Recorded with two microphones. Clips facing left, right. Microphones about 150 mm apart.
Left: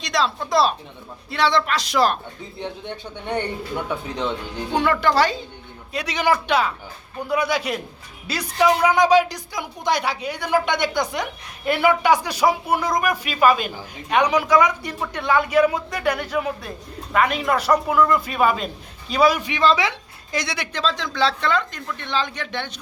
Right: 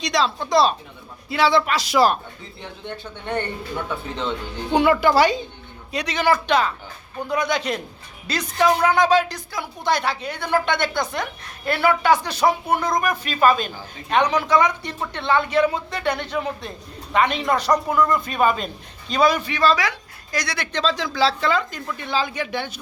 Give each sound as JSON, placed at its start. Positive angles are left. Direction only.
{"t": 0.0, "sound": "speech", "side_deg": 0}
{"t": 2.6, "sound": "speech", "side_deg": 20}
{"t": 4.7, "sound": "speech", "side_deg": -10}
{"t": 5.9, "sound": "speech", "side_deg": 5}
{"t": 20.7, "sound": "speech", "side_deg": 0}